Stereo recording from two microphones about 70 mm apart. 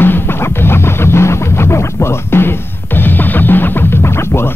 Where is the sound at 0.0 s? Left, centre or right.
Left.